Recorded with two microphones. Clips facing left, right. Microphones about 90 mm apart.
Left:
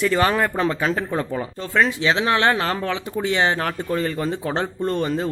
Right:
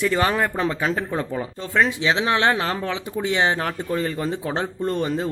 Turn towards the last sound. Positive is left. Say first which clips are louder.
# left 1 dB
turn(degrees=-10)  # may be behind; listen again after turning